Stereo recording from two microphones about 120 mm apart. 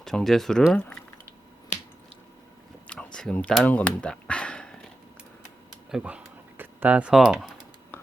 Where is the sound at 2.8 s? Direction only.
10° left (ahead or behind).